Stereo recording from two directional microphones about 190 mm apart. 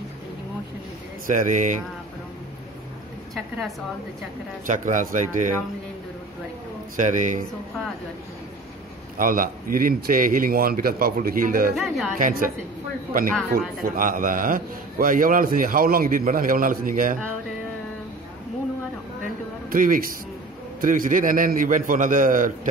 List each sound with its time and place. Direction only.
1.2 s speech: 40° right (ahead or behind)
4.6 s speech: 40° right (ahead or behind)
7.0 s speech: 40° right (ahead or behind)
9.1 s a man's voice: 45° right (ahead or behind)
11.7 s speech: centre (ahead or behind)
12.2 s a man's voice: 45° right (ahead or behind)
13.5 s a man's voice: 45° right (ahead or behind)
19.7 s a man's voice: 45° right (ahead or behind)